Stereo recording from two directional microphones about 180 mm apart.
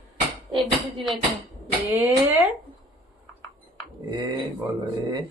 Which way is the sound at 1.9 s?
10° right (ahead or behind).